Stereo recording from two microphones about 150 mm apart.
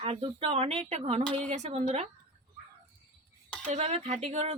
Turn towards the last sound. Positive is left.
turn(degrees=-50)  # may be behind; listen again after turning